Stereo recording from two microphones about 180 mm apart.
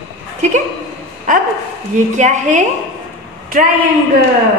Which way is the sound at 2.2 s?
40° right (ahead or behind).